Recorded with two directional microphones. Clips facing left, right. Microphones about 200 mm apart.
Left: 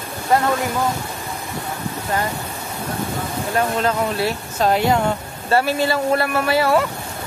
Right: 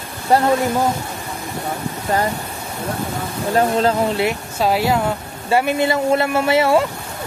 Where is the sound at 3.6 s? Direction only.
30° right (ahead or behind).